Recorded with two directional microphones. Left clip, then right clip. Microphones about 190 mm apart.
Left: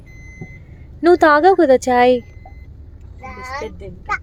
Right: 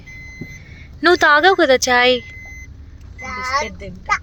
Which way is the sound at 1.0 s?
20° left (ahead or behind).